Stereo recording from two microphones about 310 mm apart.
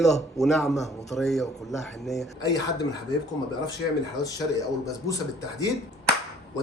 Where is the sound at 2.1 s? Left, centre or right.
Centre.